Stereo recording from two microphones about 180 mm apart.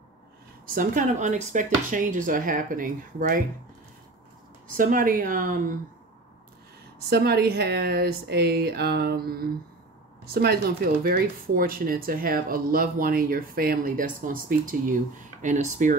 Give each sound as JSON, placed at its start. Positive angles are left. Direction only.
{"t": 0.7, "sound": "speech", "side_deg": -50}
{"t": 4.7, "sound": "speech", "side_deg": -50}
{"t": 7.1, "sound": "speech", "side_deg": -60}